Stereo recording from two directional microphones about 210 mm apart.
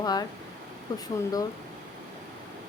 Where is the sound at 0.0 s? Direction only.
20° left (ahead or behind).